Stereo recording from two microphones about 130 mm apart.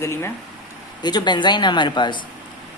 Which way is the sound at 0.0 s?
20° left (ahead or behind).